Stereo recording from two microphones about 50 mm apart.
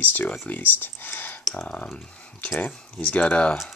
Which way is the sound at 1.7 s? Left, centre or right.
Left.